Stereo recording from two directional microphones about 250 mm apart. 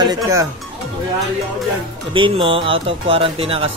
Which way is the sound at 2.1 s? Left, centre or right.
Right.